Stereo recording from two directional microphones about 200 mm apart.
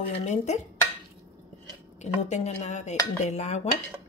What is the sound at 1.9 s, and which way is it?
Speech, 35° left (ahead or behind).